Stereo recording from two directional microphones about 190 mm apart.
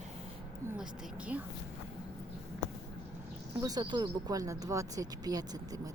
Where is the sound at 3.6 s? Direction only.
20° right (ahead or behind).